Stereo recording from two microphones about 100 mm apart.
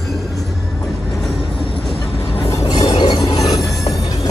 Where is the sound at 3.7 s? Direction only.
Centre (ahead or behind).